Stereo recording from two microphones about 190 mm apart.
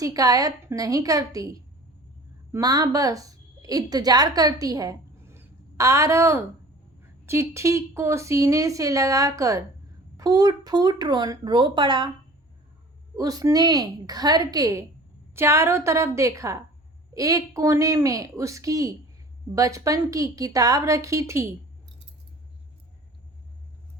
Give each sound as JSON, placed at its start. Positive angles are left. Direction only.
{"t": 0.0, "sound": "a woman's voice", "side_deg": -20}
{"t": 13.1, "sound": "speech", "side_deg": -20}